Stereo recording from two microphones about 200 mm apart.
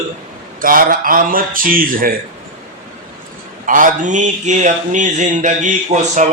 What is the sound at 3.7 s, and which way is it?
Speech, 40° right (ahead or behind).